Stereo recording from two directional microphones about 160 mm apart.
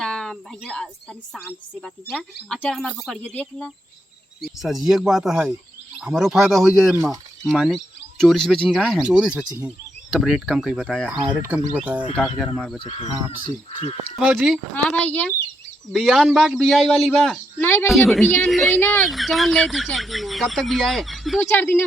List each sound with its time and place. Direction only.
0.0 s a sound: 5° left (ahead or behind)
1.3 s speech: 5° right (ahead or behind)
2.5 s speech: 5° left (ahead or behind)
3.3 s speech: 10° left (ahead or behind)
11.1 s speech: 30° right (ahead or behind)
11.4 s speech: 10° right (ahead or behind)
12.4 s speech: centre (ahead or behind)
12.8 s speech: 35° left (ahead or behind)
14.2 s speech: 5° right (ahead or behind)
14.8 s speech: 10° left (ahead or behind)
15.9 s speech: centre (ahead or behind)
17.8 s speech: centre (ahead or behind)
19.0 s speech: centre (ahead or behind)
21.5 s speech: 10° left (ahead or behind)